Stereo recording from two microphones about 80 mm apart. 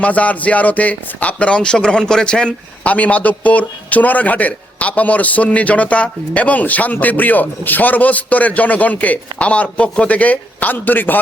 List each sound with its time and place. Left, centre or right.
0.0 s a man's voice: centre